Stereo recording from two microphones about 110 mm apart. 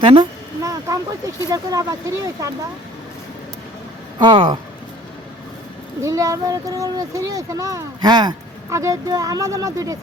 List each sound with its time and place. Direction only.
0.0 s speech: 55° right (ahead or behind)
0.6 s a sound: 30° right (ahead or behind)
1.5 s speech: 35° right (ahead or behind)
4.2 s speech: 45° right (ahead or behind)
6.0 s speech: 30° right (ahead or behind)